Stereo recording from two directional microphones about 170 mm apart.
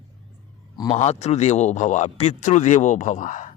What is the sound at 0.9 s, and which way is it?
Speech, 40° left (ahead or behind).